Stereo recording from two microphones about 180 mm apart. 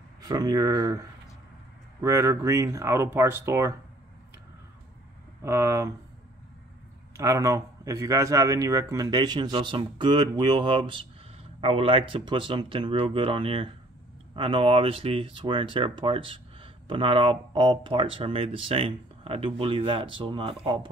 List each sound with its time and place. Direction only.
0.3 s speech: 20° right (ahead or behind)
5.4 s speech: 15° right (ahead or behind)
7.2 s speech: 20° right (ahead or behind)